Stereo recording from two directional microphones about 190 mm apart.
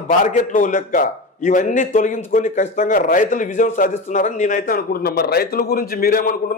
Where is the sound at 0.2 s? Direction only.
40° left (ahead or behind).